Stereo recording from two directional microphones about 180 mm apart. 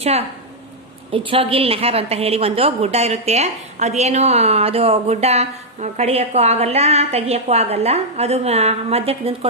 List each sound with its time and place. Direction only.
1.1 s a woman's voice: 30° right (ahead or behind)